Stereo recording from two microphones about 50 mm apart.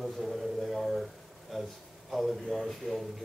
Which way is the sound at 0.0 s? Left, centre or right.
Centre.